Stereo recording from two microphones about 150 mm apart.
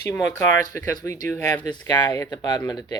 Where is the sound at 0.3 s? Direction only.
20° left (ahead or behind).